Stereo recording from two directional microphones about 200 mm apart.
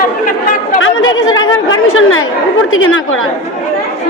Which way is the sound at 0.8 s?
75° left (ahead or behind).